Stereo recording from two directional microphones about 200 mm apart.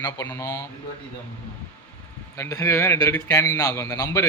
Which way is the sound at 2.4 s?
15° left (ahead or behind).